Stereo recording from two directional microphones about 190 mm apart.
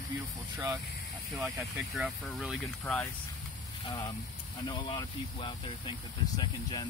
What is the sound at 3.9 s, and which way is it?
Speech, 20° left (ahead or behind).